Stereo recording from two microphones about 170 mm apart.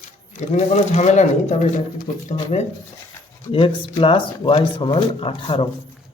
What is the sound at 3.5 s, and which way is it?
Speech, 30° left (ahead or behind).